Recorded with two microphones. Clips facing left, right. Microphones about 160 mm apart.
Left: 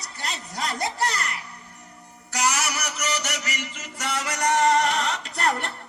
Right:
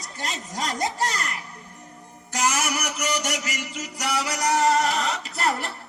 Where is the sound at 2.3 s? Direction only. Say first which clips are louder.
Right 1 dB; 50° right (ahead or behind).